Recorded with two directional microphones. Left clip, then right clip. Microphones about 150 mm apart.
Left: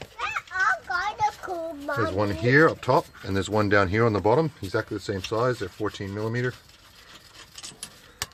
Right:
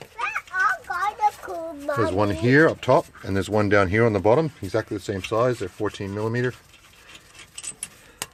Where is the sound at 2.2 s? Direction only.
35° right (ahead or behind).